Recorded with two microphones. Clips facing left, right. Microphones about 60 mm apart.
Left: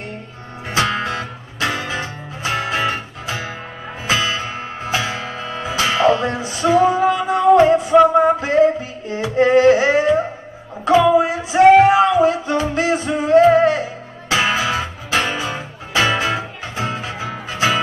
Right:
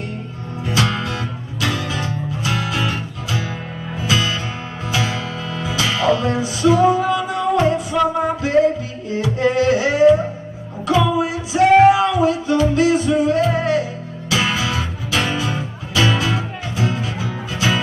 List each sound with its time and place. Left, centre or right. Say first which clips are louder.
0.7 s music: left 2 dB; left
8.1 s a sound: left 5 dB; left
9.0 s music: left 2 dB; left